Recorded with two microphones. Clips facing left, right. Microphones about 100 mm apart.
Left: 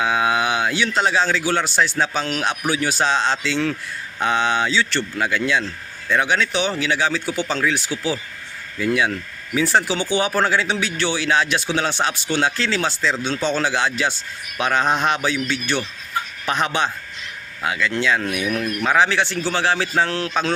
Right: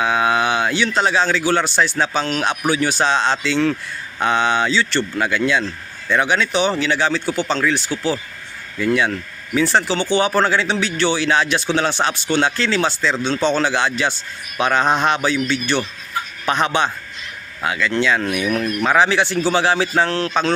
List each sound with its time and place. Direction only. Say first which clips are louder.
0.0 s speech: right 2 dB; centre (ahead or behind)